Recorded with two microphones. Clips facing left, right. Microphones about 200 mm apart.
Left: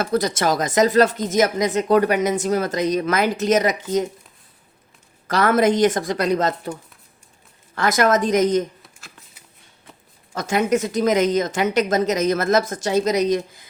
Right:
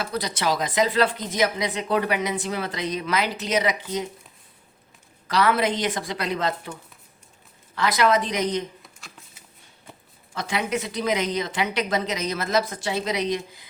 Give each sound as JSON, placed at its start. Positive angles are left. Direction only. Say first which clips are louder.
{"t": 0.0, "sound": "speech", "louder": "left 6 dB", "side_deg": 45}
{"t": 5.3, "sound": "speech", "louder": "left 5 dB", "side_deg": 45}
{"t": 7.8, "sound": "speech", "louder": "left 3 dB", "side_deg": 45}
{"t": 10.3, "sound": "speech", "louder": "left 7 dB", "side_deg": 45}